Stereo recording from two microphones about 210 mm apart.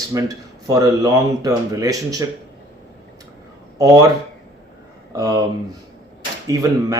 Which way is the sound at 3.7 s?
15° right (ahead or behind).